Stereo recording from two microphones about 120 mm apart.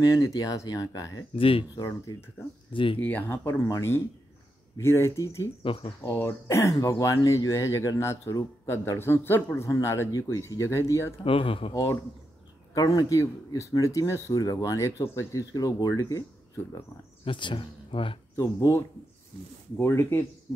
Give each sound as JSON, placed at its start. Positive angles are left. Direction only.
{"t": 0.0, "sound": "speech", "side_deg": 30}
{"t": 1.3, "sound": "speech", "side_deg": 50}
{"t": 1.8, "sound": "speech", "side_deg": 30}
{"t": 2.7, "sound": "speech", "side_deg": 45}
{"t": 3.0, "sound": "speech", "side_deg": 15}
{"t": 5.6, "sound": "speech", "side_deg": 45}
{"t": 6.0, "sound": "speech", "side_deg": 20}
{"t": 11.2, "sound": "speech", "side_deg": 50}
{"t": 11.7, "sound": "speech", "side_deg": 20}
{"t": 17.2, "sound": "speech", "side_deg": 45}
{"t": 18.3, "sound": "speech", "side_deg": 25}